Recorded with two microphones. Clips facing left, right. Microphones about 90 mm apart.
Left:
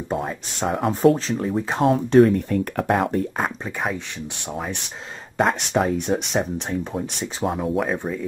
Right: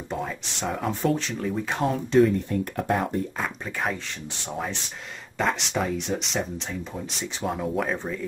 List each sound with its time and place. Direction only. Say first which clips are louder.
0.1 s speech: left 4 dB; 45° left (ahead or behind)
1.1 s speech: left 4 dB; 35° left (ahead or behind)
1.9 s speech: left 5 dB; 60° left (ahead or behind)
3.8 s speech: left 2 dB; 10° left (ahead or behind)
5.4 s speech: left 5 dB; 50° left (ahead or behind)
7.5 s speech: left 2 dB; 5° left (ahead or behind)